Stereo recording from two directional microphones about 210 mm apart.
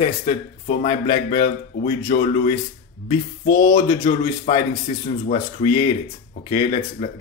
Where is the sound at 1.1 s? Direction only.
45° left (ahead or behind).